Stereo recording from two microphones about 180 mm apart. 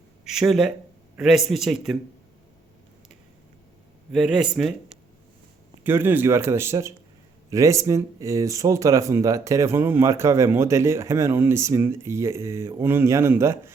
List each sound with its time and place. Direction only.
0.3 s speech: centre (ahead or behind)
4.1 s speech: centre (ahead or behind)